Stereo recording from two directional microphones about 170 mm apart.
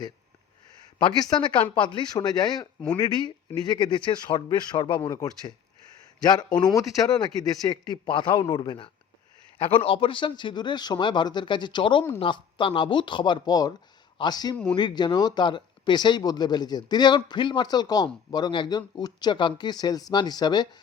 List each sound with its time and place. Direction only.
0.9 s speech: 25° left (ahead or behind)
6.7 s speech: 20° left (ahead or behind)
14.5 s speech: 5° left (ahead or behind)
14.8 s speech: 25° left (ahead or behind)